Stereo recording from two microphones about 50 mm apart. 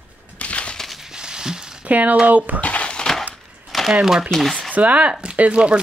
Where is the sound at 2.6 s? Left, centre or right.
Left.